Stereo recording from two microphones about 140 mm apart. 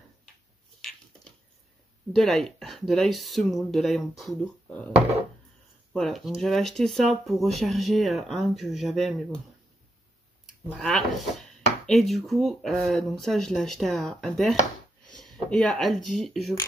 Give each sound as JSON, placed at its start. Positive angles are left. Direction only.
{"t": 2.1, "sound": "speech", "side_deg": 5}
{"t": 5.9, "sound": "speech", "side_deg": 0}
{"t": 10.8, "sound": "speech", "side_deg": 0}
{"t": 15.0, "sound": "a sound", "side_deg": 5}
{"t": 15.5, "sound": "speech", "side_deg": 5}